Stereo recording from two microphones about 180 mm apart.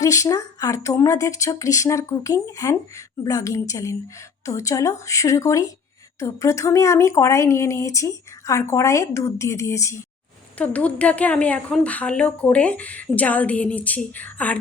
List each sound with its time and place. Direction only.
0.0 s a woman's voice: 20° left (ahead or behind)